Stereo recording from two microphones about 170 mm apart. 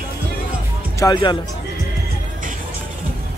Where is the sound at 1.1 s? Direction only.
30° left (ahead or behind).